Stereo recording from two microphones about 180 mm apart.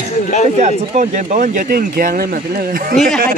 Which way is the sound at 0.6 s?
45° right (ahead or behind).